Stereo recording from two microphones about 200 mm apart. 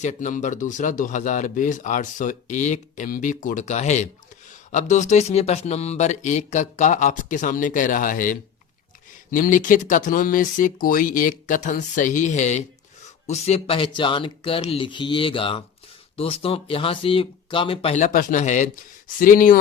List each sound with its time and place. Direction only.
0.0 s speech: 35° left (ahead or behind)